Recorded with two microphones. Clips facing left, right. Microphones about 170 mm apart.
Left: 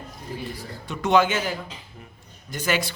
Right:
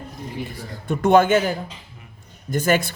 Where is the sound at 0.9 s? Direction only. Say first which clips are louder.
Right 5 dB; 50° right (ahead or behind).